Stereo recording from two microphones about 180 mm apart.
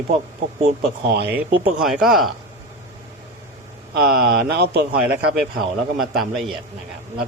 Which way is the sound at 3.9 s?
60° right (ahead or behind).